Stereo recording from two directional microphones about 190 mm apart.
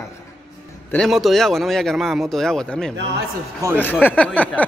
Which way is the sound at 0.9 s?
Centre (ahead or behind).